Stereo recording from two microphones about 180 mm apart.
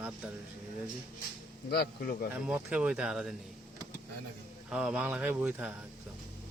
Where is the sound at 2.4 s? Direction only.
5° right (ahead or behind).